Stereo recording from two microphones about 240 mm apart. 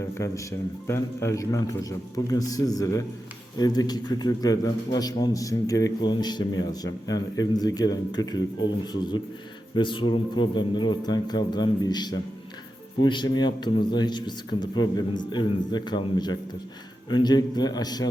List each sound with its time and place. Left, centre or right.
0.0 s a man's voice: centre